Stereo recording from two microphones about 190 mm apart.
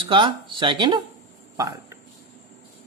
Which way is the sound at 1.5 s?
15° right (ahead or behind).